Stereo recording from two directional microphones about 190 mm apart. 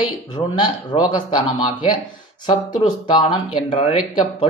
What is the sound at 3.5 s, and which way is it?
Speech, 30° left (ahead or behind).